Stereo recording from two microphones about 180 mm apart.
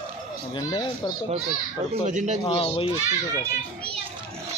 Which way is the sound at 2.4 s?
30° left (ahead or behind).